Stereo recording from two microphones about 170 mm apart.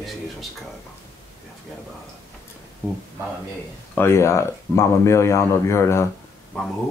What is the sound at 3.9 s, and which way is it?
Speech, 15° left (ahead or behind).